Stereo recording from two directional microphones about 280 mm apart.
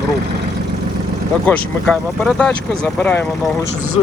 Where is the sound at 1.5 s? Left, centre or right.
Centre.